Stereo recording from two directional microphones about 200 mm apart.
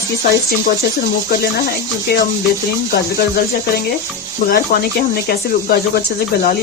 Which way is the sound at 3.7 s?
50° left (ahead or behind).